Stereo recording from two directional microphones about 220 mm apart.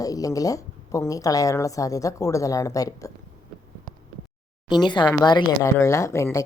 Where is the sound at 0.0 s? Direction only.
15° left (ahead or behind).